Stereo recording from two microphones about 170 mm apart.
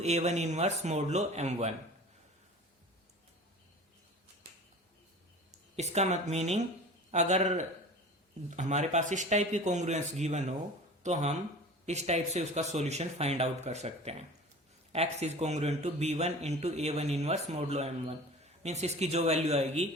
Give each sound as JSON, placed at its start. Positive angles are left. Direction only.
{"t": 0.0, "sound": "a man's voice", "side_deg": -40}
{"t": 5.7, "sound": "a man's voice", "side_deg": -40}